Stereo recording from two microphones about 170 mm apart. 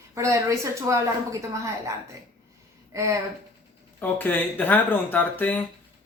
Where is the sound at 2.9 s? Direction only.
20° right (ahead or behind).